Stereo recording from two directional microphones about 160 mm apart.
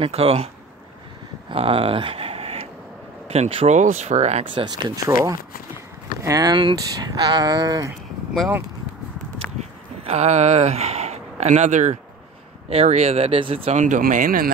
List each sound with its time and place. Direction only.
0.0 s speech: 40° right (ahead or behind)
1.5 s speech: 35° right (ahead or behind)
4.6 s speech: 25° right (ahead or behind)
8.3 s speech: 5° right (ahead or behind)
10.0 s speech: 45° right (ahead or behind)
13.7 s speech: 55° right (ahead or behind)